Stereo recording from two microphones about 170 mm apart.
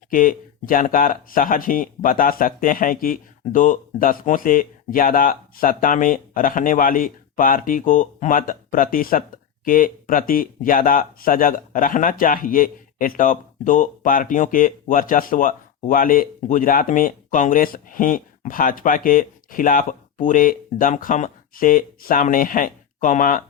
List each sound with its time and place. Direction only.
0.1 s speech: 55° left (ahead or behind)